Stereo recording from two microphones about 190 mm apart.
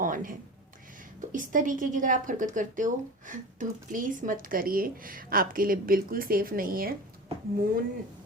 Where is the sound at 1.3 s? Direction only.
45° right (ahead or behind).